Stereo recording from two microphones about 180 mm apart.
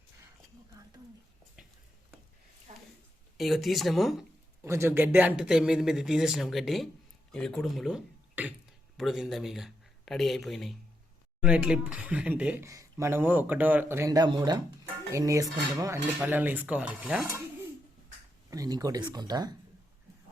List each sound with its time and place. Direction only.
2.7 s a sound: 40° right (ahead or behind)
3.3 s speech: centre (ahead or behind)
4.6 s speech: 15° right (ahead or behind)
18.5 s speech: 20° right (ahead or behind)